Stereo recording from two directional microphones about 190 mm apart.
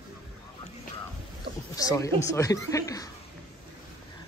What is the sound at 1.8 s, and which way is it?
Speech, 15° left (ahead or behind).